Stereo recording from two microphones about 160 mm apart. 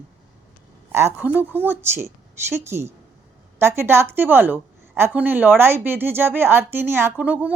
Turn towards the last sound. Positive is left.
turn(degrees=-10)  # may be behind; listen again after turning